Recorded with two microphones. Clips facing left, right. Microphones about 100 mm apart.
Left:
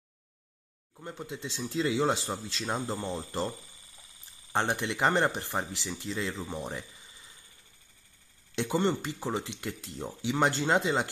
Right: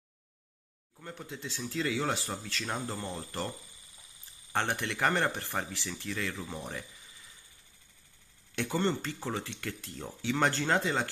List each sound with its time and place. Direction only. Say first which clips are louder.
0.9 s speech: left 3 dB; 20° left (ahead or behind)
8.5 s speech: left 3 dB; 20° left (ahead or behind)